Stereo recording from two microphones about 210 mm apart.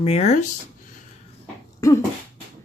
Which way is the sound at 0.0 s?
30° left (ahead or behind).